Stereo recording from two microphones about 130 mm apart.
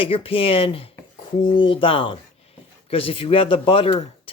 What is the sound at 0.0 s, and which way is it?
Speech, 45° left (ahead or behind).